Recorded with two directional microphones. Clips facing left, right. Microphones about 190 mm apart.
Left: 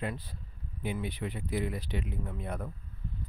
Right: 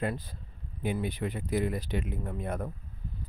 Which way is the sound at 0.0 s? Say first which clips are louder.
Right 4 dB; 45° right (ahead or behind).